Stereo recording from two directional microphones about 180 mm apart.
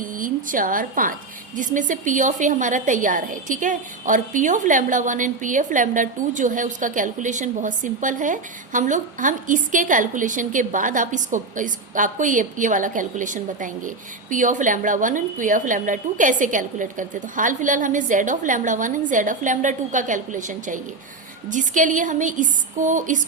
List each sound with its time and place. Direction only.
0.0 s a woman's voice: 50° right (ahead or behind)